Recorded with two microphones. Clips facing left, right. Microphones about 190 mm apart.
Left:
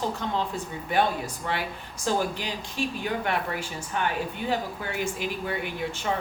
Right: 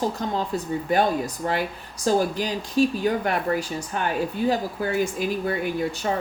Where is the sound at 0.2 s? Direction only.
40° right (ahead or behind).